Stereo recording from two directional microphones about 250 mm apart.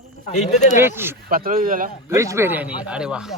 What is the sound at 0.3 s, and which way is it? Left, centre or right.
Speech, left.